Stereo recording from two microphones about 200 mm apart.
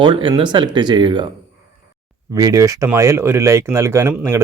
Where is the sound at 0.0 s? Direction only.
25° right (ahead or behind).